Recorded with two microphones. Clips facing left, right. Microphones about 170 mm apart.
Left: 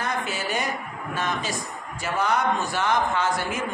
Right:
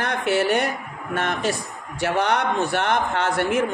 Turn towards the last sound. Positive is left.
turn(degrees=-65)  # may be behind; listen again after turning